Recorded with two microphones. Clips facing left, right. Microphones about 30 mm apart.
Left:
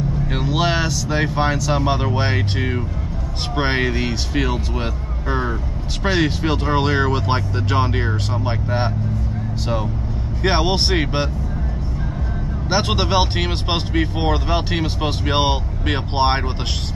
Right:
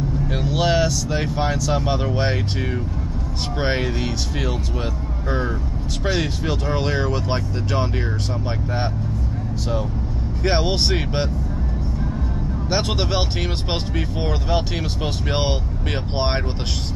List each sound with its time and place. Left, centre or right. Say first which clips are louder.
0.3 s vehicle: even; centre
1.1 s speech: left 3 dB; left
6.0 s speech: left 4 dB; left
10.4 s speech: left 2 dB; left
12.6 s speech: left 3 dB; left
13.4 s speech: left 3 dB; left